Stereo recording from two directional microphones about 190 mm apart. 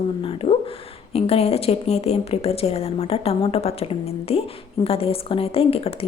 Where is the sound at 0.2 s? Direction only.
30° left (ahead or behind).